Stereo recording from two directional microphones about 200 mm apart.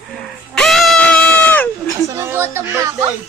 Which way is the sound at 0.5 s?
Centre (ahead or behind).